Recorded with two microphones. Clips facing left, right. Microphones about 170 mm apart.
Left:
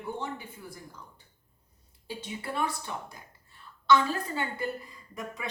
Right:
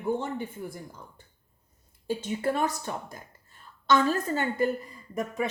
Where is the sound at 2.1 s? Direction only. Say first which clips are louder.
Right 9 dB; 45° right (ahead or behind).